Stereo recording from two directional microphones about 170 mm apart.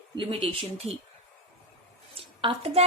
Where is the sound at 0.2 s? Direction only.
30° right (ahead or behind).